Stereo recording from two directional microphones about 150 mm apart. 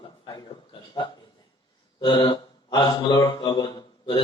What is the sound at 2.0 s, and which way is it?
A man's voice, 30° left (ahead or behind).